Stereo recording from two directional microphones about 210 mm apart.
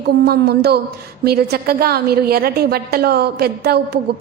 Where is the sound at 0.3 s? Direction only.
50° right (ahead or behind).